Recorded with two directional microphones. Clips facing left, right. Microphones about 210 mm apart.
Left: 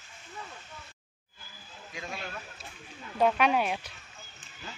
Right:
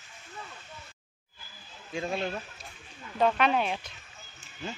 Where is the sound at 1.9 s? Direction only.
30° right (ahead or behind).